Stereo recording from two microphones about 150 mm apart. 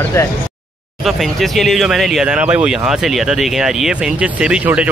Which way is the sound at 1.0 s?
Centre (ahead or behind).